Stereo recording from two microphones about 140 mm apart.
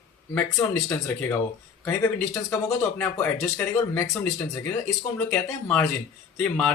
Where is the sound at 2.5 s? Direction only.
15° left (ahead or behind).